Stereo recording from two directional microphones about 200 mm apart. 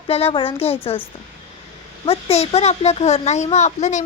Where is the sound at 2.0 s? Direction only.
30° left (ahead or behind).